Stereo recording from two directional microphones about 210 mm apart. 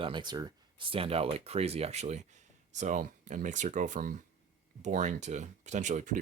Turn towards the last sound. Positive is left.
turn(degrees=-35)  # may be behind; listen again after turning